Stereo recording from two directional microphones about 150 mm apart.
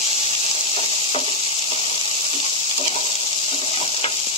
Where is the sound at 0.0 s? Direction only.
45° left (ahead or behind).